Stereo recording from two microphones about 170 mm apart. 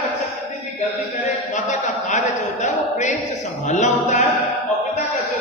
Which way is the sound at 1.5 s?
45° left (ahead or behind).